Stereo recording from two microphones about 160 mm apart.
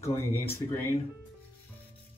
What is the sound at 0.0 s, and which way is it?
Speech, 15° left (ahead or behind).